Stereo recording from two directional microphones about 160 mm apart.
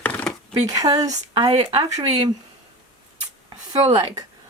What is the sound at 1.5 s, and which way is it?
Speech, 35° right (ahead or behind).